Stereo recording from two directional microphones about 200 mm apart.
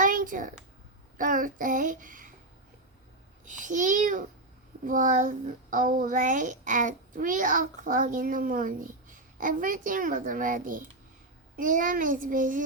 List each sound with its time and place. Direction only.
0.0 s a sound: 40° right (ahead or behind)
1.2 s a child's voice: 40° right (ahead or behind)
3.4 s a child's voice: 40° right (ahead or behind)